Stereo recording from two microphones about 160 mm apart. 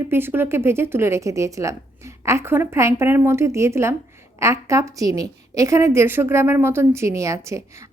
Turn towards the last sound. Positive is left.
turn(degrees=-20)  # may be behind; listen again after turning